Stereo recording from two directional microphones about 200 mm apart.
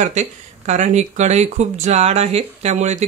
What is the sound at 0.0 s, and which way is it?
Speech, 35° right (ahead or behind).